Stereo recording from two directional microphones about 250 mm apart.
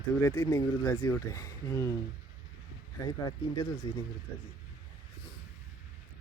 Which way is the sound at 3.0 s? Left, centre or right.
Centre.